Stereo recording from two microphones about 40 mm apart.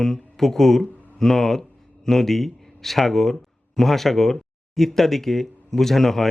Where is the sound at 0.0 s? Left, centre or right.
Centre.